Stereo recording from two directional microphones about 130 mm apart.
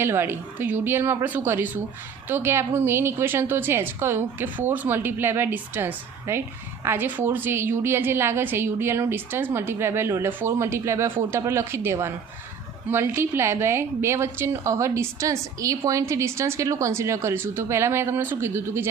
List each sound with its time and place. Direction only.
0.0 s a woman's voice: 20° right (ahead or behind)